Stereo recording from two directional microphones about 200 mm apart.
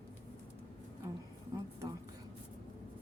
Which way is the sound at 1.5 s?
15° right (ahead or behind).